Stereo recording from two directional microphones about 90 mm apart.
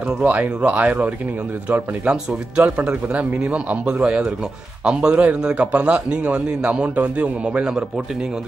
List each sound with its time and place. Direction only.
0.2 s a man's voice: 15° right (ahead or behind)